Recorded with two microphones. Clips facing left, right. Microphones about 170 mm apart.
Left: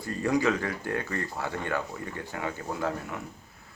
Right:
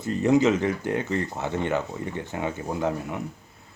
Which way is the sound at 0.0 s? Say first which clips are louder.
Right 6 dB; 20° right (ahead or behind).